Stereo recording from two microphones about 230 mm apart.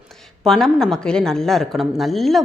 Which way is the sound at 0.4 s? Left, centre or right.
Centre.